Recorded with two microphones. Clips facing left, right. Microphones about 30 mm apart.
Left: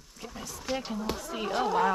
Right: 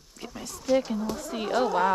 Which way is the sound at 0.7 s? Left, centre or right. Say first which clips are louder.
Right 9 dB; left.